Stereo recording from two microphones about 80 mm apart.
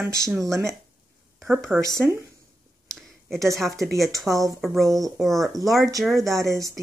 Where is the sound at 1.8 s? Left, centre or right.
Right.